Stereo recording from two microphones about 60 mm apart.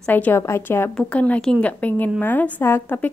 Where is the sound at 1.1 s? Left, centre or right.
Left.